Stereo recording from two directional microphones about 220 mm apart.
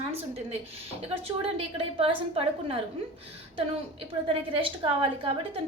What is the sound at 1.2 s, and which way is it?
A woman's voice, 25° right (ahead or behind).